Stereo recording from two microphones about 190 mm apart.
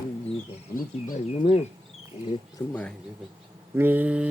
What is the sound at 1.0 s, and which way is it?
Speech, 40° left (ahead or behind).